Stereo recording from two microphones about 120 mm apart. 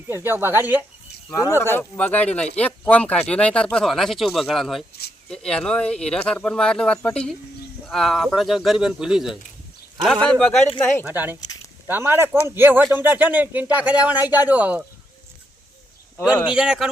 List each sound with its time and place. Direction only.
0.1 s speech: 20° right (ahead or behind)
1.3 s speech: 25° left (ahead or behind); by 9.4 s 5° right (ahead or behind)
10.2 s speech: 10° left (ahead or behind)
11.0 s speech: 15° right (ahead or behind)
16.5 s speech: 5° right (ahead or behind)